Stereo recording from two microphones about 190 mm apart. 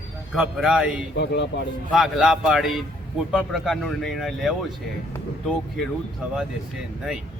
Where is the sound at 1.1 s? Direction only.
65° left (ahead or behind).